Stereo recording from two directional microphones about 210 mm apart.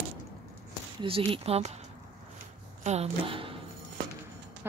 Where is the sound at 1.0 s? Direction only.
25° right (ahead or behind).